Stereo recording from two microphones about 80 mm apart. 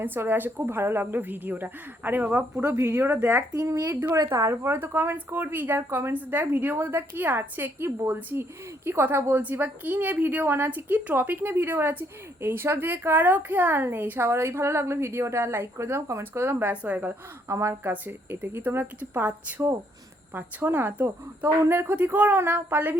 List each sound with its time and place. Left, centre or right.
0.0 s a woman's voice: right
2.6 s speech: right
2.9 s a woman's voice: right
3.2 s a woman's voice: right; by 17.2 s centre
17.5 s speech: right
17.9 s a woman's voice: right